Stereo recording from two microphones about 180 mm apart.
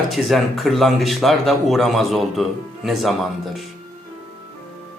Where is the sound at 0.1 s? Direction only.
Centre (ahead or behind).